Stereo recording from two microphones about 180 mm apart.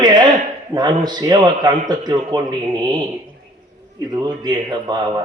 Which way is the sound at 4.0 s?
20° right (ahead or behind).